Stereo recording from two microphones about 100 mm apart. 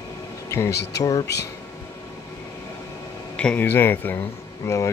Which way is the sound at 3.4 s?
15° left (ahead or behind).